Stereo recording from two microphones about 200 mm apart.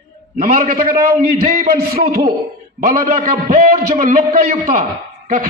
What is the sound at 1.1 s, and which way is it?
A man's voice, 45° right (ahead or behind).